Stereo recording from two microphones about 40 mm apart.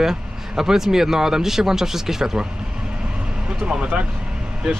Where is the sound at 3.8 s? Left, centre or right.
Right.